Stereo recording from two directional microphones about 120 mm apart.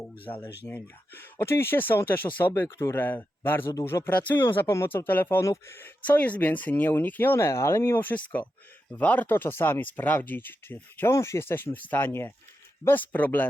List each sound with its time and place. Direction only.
0.3 s speech: 15° left (ahead or behind)